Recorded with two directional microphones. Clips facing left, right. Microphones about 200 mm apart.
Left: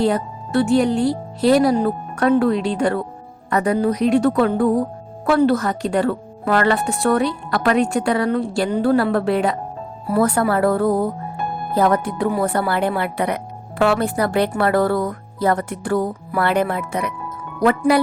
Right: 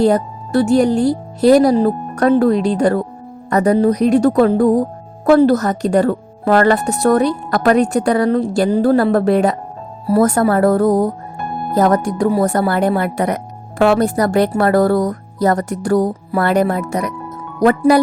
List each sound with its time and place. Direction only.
0.0 s speech: 40° right (ahead or behind)